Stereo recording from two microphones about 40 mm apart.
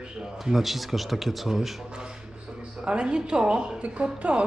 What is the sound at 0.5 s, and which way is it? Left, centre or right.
Speech, centre.